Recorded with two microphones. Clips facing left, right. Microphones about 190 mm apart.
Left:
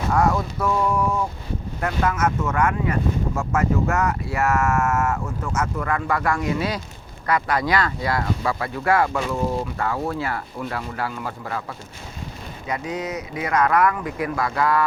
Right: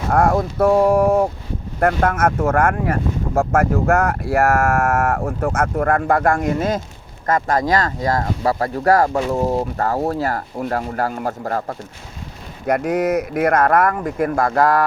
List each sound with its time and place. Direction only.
0.1 s speech: 55° right (ahead or behind)
12.6 s speech: 60° right (ahead or behind); by 14.8 s 45° right (ahead or behind)